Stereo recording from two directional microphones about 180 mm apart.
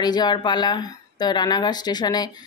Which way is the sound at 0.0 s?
25° left (ahead or behind).